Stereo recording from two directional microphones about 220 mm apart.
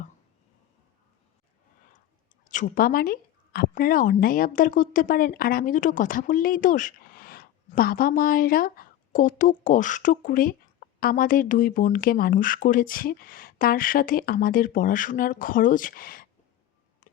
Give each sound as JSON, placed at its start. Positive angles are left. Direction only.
{"t": 2.4, "sound": "a woman's voice", "side_deg": 35}